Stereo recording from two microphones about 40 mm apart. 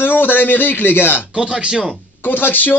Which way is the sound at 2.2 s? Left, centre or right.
Left.